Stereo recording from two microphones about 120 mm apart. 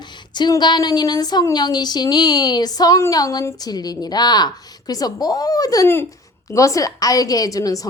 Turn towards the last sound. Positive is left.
turn(degrees=30)  # may be behind; listen again after turning